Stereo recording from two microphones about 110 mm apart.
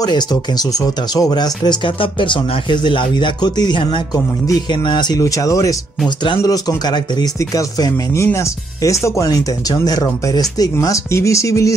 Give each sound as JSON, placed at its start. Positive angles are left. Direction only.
{"t": 0.0, "sound": "speech", "side_deg": 35}
{"t": 2.0, "sound": "speech", "side_deg": 50}